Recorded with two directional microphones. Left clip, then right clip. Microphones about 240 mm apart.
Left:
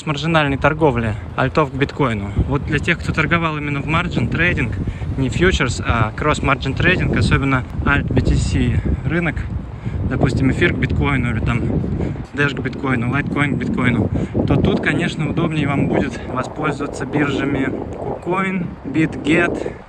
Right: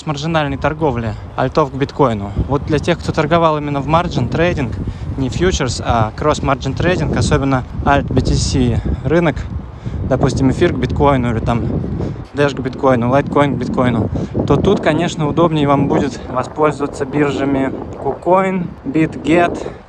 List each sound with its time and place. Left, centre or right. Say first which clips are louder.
0.0 s speech: even; centre